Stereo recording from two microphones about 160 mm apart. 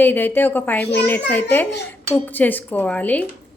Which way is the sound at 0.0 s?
10° left (ahead or behind).